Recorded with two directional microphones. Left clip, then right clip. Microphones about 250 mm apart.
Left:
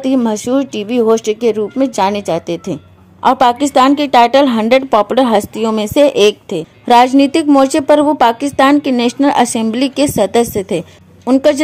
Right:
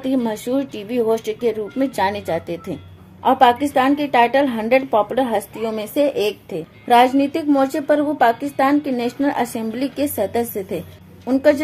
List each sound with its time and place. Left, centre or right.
0.0 s a woman's voice: left